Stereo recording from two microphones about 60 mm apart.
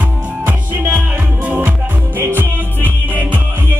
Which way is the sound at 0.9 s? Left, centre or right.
Right.